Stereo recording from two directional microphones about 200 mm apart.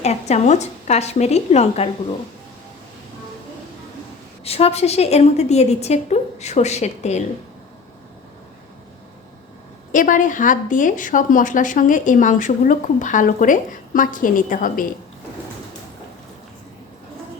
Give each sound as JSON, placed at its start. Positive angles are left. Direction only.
{"t": 0.0, "sound": "speech", "side_deg": 35}
{"t": 4.4, "sound": "speech", "side_deg": 30}
{"t": 9.9, "sound": "speech", "side_deg": 40}